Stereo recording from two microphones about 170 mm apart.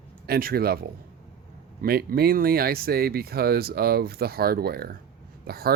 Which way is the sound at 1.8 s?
65° right (ahead or behind).